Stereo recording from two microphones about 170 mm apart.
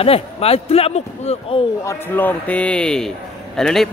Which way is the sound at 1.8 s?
10° left (ahead or behind).